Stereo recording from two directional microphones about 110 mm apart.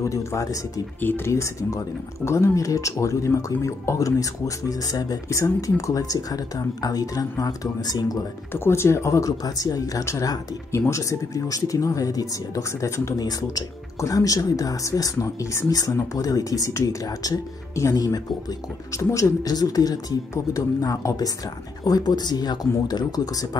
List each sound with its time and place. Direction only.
0.0 s speech: 30° left (ahead or behind)
8.5 s speech: 25° left (ahead or behind); by 23.6 s 40° left (ahead or behind)